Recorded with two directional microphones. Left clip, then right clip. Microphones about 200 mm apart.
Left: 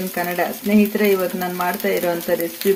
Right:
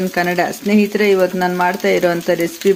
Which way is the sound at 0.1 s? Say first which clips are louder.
Right 3 dB; 45° right (ahead or behind).